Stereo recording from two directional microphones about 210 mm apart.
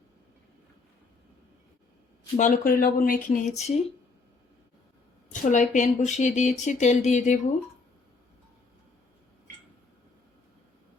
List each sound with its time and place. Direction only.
2.3 s speech: 40° left (ahead or behind)
5.3 s speech: 35° left (ahead or behind)